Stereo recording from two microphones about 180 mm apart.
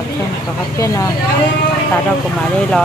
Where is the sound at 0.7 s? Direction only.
20° left (ahead or behind).